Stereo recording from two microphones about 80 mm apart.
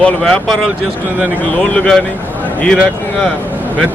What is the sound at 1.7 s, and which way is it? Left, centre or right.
Speech, centre.